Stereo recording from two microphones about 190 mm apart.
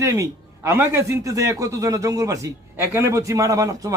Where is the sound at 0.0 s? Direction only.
15° right (ahead or behind).